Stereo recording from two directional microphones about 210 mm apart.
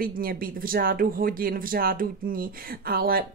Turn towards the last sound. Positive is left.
turn(degrees=-45)  # may be behind; listen again after turning